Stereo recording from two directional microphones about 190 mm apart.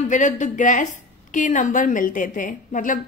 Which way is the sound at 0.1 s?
40° left (ahead or behind).